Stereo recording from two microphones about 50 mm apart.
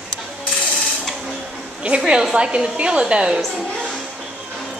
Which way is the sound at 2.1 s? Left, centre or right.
Centre.